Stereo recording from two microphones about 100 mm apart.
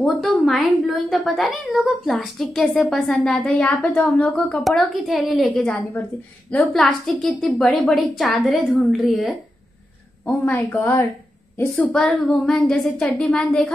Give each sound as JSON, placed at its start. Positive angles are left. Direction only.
{"t": 0.0, "sound": "a woman's voice", "side_deg": 0}
{"t": 4.6, "sound": "a woman's voice", "side_deg": 0}
{"t": 10.3, "sound": "a woman's voice", "side_deg": 15}